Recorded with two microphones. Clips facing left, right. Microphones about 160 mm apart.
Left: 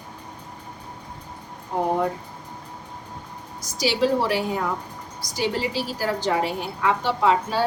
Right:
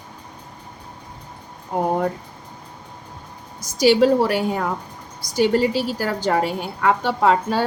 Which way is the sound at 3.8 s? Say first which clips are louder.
Right 6 dB; 50° right (ahead or behind).